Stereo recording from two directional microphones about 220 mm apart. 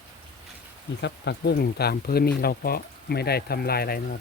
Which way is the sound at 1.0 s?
50° left (ahead or behind).